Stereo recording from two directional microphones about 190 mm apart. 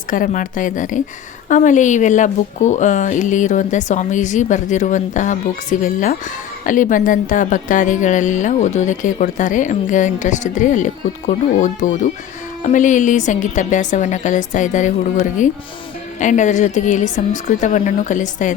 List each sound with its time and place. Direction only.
0.1 s a woman's voice: 45° left (ahead or behind)